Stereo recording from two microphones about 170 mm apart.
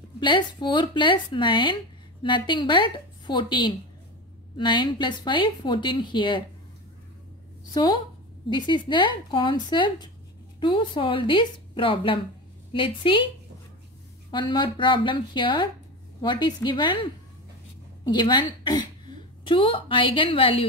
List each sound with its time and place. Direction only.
0.2 s speech: 25° left (ahead or behind)
7.7 s speech: 25° left (ahead or behind)
14.3 s a woman's voice: 30° left (ahead or behind)